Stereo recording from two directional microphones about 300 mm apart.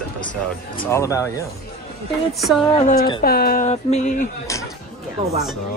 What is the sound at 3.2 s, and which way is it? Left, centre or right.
Speech, left.